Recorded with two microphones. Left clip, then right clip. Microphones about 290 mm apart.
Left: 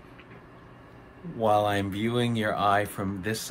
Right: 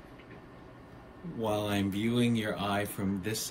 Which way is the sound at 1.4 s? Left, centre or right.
Centre.